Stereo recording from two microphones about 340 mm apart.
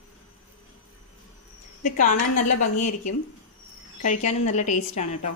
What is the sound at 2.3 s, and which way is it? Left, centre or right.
Speech, left.